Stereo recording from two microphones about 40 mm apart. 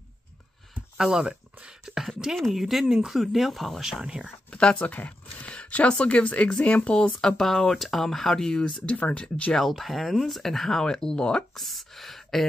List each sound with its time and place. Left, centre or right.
0.9 s speech: centre
4.0 s speech: right
4.5 s a sound: left
4.7 s speech: left; by 8.8 s centre
8.8 s speech: left
9.7 s speech: centre
10.8 s speech: centre
11.5 s speech: centre